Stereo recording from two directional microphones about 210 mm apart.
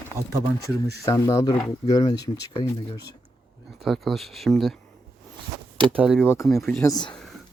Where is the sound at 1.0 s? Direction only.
15° left (ahead or behind).